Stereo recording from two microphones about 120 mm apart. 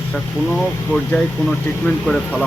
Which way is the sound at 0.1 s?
Centre (ahead or behind).